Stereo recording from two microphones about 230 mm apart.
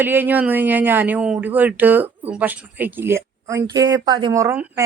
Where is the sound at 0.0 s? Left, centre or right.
Centre.